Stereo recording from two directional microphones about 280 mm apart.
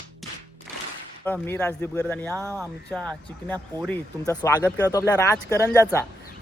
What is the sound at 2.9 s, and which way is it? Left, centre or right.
Speech, centre.